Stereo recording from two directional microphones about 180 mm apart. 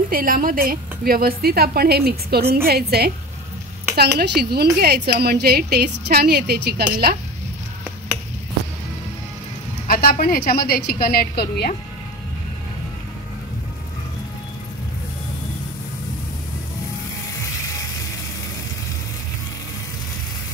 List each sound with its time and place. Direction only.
0.1 s a woman's voice: 50° right (ahead or behind)
9.8 s a woman's voice: 55° left (ahead or behind)